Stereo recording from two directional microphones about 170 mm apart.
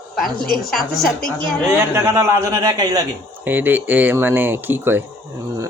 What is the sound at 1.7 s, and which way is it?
A man's voice, 15° right (ahead or behind).